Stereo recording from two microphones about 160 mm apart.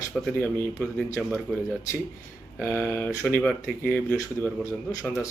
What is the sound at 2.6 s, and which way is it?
A man's voice, 15° left (ahead or behind).